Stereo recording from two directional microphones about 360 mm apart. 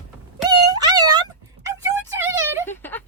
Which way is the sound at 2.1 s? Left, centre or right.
Centre.